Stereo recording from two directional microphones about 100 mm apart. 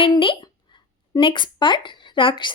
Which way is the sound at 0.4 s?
40° left (ahead or behind).